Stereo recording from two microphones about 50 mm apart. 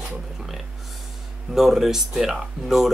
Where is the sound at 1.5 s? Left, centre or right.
Centre.